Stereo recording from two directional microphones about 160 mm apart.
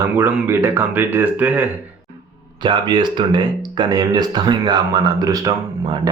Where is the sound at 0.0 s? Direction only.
15° right (ahead or behind).